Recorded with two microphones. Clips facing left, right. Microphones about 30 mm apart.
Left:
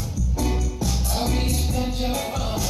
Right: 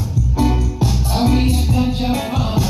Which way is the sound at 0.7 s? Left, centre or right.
Right.